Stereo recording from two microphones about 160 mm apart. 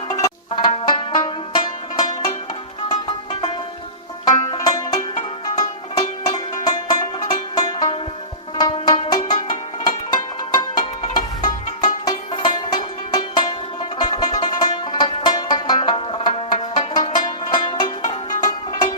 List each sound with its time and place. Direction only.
0.1 s banjo: 25° left (ahead or behind)
4.5 s banjo: 25° left (ahead or behind)
5.5 s music: 25° left (ahead or behind)